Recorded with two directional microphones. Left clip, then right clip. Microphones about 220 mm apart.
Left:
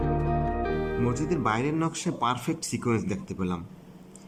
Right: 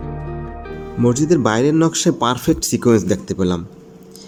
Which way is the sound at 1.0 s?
25° right (ahead or behind).